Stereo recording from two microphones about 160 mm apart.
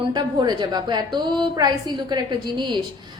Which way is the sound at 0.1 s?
30° right (ahead or behind).